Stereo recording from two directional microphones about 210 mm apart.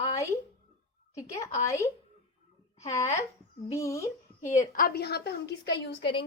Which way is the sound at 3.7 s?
15° left (ahead or behind).